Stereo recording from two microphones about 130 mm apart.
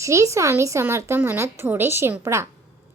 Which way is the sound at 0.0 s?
25° right (ahead or behind).